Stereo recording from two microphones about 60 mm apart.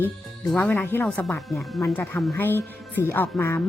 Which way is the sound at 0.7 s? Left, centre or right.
Left.